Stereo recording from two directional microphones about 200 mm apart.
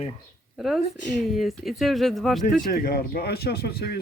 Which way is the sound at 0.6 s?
Centre (ahead or behind).